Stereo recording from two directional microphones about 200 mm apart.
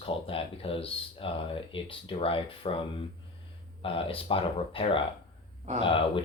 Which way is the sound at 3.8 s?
25° left (ahead or behind).